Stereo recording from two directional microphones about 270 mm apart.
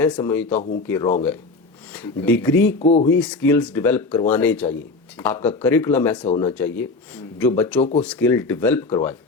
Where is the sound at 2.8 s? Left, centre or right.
Left.